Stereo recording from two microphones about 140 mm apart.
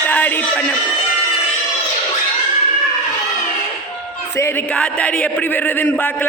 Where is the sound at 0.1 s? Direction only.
10° left (ahead or behind).